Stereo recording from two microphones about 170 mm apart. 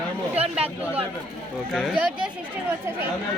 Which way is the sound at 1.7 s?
5° right (ahead or behind).